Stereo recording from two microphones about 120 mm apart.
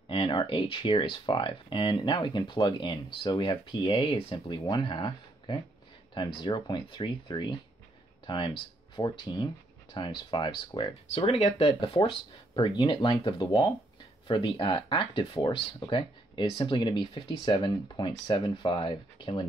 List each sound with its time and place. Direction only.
0.1 s speech: 40° left (ahead or behind)
8.9 s speech: 40° left (ahead or behind)
11.1 s speech: 60° left (ahead or behind)
11.8 s speech: 45° left (ahead or behind)